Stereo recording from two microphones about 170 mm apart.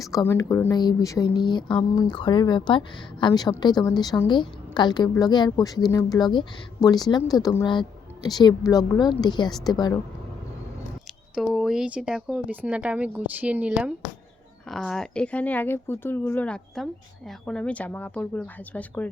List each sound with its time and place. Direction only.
0.0 s speech: 20° left (ahead or behind)
11.3 s speech: centre (ahead or behind)